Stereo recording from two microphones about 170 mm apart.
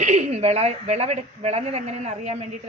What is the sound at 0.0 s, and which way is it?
A woman's voice, 45° right (ahead or behind).